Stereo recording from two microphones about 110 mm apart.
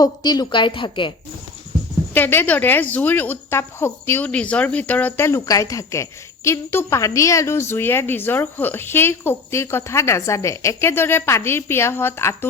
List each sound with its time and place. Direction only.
0.0 s a woman's voice: 40° left (ahead or behind)
2.1 s a woman's voice: 15° left (ahead or behind)